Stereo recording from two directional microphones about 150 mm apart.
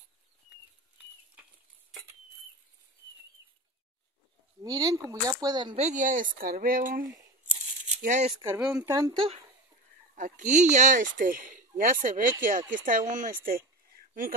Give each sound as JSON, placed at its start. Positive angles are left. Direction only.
{"t": 4.6, "sound": "speech", "side_deg": -25}
{"t": 5.8, "sound": "speech", "side_deg": -55}
{"t": 7.9, "sound": "speech", "side_deg": -55}
{"t": 8.5, "sound": "speech", "side_deg": -5}
{"t": 8.8, "sound": "speech", "side_deg": -20}
{"t": 9.1, "sound": "speech", "side_deg": -35}
{"t": 10.1, "sound": "speech", "side_deg": -60}
{"t": 13.9, "sound": "a sound", "side_deg": -65}